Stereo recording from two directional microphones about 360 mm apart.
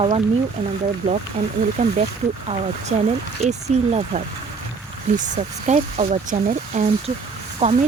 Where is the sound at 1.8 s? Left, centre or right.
Centre.